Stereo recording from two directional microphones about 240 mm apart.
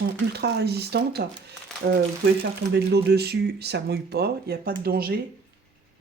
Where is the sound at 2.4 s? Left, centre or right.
Right.